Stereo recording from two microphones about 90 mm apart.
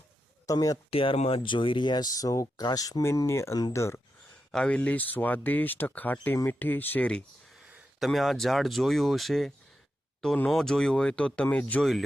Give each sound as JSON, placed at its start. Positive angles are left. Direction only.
{"t": 0.4, "sound": "speech", "side_deg": 40}
{"t": 0.9, "sound": "speech", "side_deg": 90}
{"t": 3.0, "sound": "speech", "side_deg": 30}
{"t": 4.5, "sound": "speech", "side_deg": 10}
{"t": 7.9, "sound": "speech", "side_deg": 0}
{"t": 10.5, "sound": "speech", "side_deg": 5}
{"t": 11.8, "sound": "speech", "side_deg": 0}